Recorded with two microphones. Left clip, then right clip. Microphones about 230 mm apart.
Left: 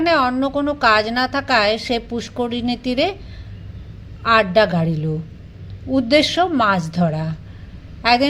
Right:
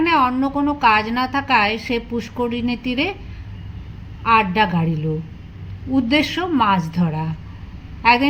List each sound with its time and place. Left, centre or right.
0.0 s a woman's voice: left
4.2 s a woman's voice: left